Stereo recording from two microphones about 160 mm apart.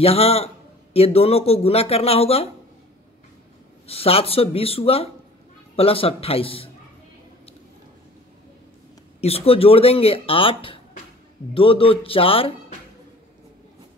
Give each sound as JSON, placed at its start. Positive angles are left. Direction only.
{"t": 0.0, "sound": "speech", "side_deg": 40}
{"t": 3.8, "sound": "speech", "side_deg": 40}
{"t": 9.2, "sound": "speech", "side_deg": 40}